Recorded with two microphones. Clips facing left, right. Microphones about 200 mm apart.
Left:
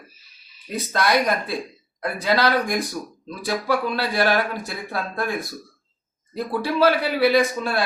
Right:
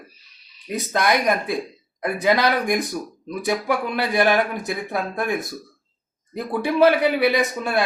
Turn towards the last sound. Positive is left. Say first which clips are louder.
# left 2 dB
turn(degrees=-20)  # may be behind; listen again after turning